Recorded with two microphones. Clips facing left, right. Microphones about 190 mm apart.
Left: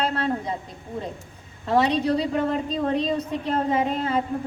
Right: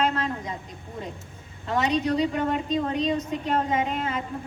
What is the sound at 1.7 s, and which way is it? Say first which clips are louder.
A woman's voice: left 3 dB; 35° left (ahead or behind).